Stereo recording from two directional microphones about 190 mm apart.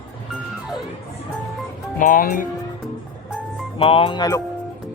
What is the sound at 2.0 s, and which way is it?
Speech, 45° left (ahead or behind).